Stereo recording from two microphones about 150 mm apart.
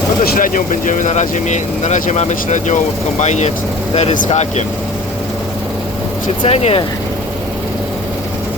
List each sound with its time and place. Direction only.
0.3 s speech: 65° left (ahead or behind); by 4.6 s 50° left (ahead or behind)
6.4 s speech: 40° left (ahead or behind)